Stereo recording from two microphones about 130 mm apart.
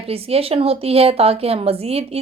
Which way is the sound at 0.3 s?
50° right (ahead or behind).